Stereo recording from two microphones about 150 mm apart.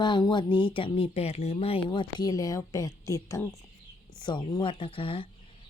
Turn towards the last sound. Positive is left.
turn(degrees=35)  # may be behind; listen again after turning